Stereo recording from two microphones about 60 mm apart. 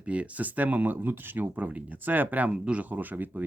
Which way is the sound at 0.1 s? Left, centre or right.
Right.